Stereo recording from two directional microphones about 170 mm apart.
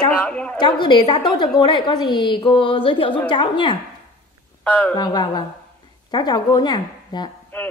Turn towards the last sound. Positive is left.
turn(degrees=10)  # may be behind; listen again after turning